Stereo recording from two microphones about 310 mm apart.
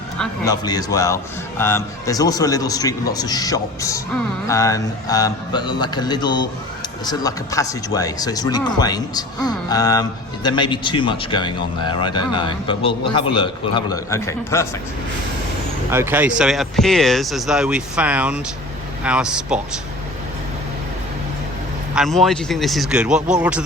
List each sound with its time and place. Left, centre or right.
0.2 s speech: centre
15.9 s speech: centre
21.9 s speech: centre